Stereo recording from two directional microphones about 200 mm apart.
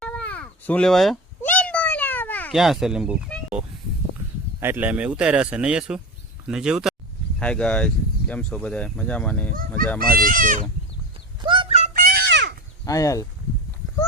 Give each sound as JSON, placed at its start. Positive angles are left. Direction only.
{"t": 0.0, "sound": "cat", "side_deg": 5}
{"t": 2.5, "sound": "speech", "side_deg": 0}
{"t": 4.6, "sound": "speech", "side_deg": -10}
{"t": 9.5, "sound": "speech", "side_deg": -45}
{"t": 11.4, "sound": "a sound", "side_deg": -25}
{"t": 11.9, "sound": "a sound", "side_deg": -50}
{"t": 12.8, "sound": "speech", "side_deg": 15}